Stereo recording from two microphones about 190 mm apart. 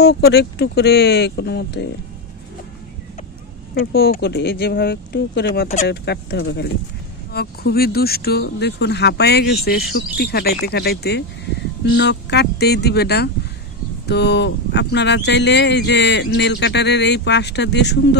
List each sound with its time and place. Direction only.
0.0 s speech: 60° left (ahead or behind)
3.7 s speech: 55° left (ahead or behind)